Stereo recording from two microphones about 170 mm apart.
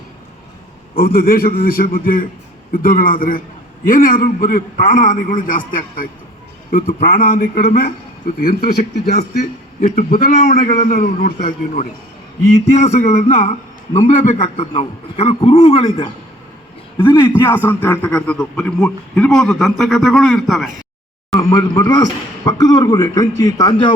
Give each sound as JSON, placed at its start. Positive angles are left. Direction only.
{"t": 0.9, "sound": "a man's voice", "side_deg": 60}
{"t": 8.4, "sound": "a man's voice", "side_deg": 65}
{"t": 9.8, "sound": "a man's voice", "side_deg": 55}
{"t": 21.3, "sound": "a man's voice", "side_deg": 20}